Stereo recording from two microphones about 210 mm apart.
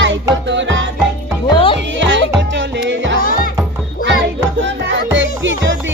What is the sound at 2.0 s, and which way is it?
Music, 60° right (ahead or behind).